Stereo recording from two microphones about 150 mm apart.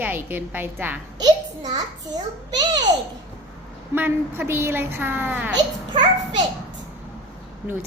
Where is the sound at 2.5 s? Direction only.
30° right (ahead or behind).